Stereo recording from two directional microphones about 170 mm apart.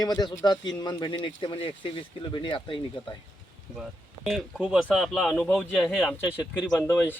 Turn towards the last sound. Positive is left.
turn(degrees=10)  # may be behind; listen again after turning